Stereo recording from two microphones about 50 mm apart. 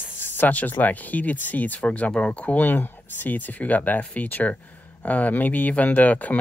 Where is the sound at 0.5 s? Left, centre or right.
Left.